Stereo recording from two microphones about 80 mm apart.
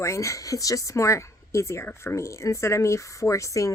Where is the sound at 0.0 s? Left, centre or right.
Left.